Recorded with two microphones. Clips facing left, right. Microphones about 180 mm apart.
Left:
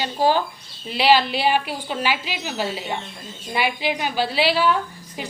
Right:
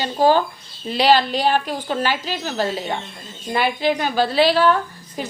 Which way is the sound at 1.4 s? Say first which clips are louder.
Right 2 dB; 10° left (ahead or behind).